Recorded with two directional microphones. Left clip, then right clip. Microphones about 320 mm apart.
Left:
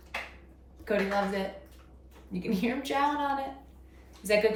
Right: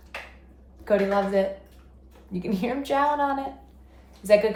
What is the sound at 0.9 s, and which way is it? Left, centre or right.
Speech, centre.